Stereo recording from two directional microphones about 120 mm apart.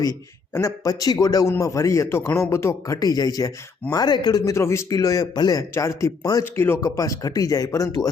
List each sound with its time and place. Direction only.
0.5 s a man's voice: 25° left (ahead or behind)